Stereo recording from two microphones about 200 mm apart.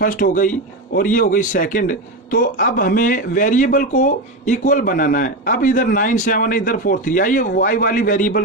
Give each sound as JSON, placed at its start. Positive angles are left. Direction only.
{"t": 0.0, "sound": "speech", "side_deg": 40}